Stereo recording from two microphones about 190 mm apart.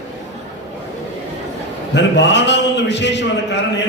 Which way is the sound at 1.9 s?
65° left (ahead or behind).